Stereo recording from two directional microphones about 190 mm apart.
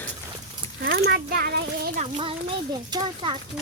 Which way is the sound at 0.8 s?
55° right (ahead or behind).